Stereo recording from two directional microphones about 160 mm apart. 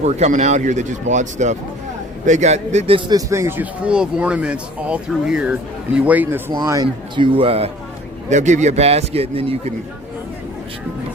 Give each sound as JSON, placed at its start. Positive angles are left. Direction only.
{"t": 0.0, "sound": "speech", "side_deg": -45}
{"t": 3.1, "sound": "speech", "side_deg": -20}
{"t": 6.5, "sound": "speech", "side_deg": -25}
{"t": 7.3, "sound": "a man's voice", "side_deg": -35}
{"t": 8.3, "sound": "a man's voice", "side_deg": -50}